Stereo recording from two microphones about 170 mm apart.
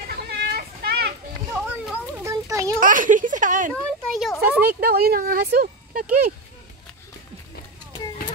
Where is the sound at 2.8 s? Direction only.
50° right (ahead or behind).